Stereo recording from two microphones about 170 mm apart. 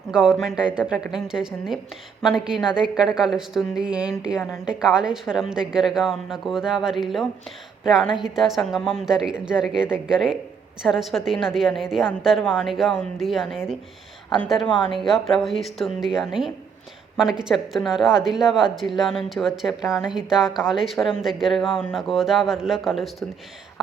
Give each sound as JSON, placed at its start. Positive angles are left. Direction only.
{"t": 0.1, "sound": "speech", "side_deg": -5}
{"t": 14.7, "sound": "speech", "side_deg": 25}
{"t": 14.9, "sound": "speech", "side_deg": 0}